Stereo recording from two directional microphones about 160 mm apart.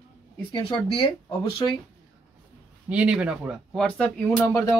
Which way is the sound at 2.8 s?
5° right (ahead or behind).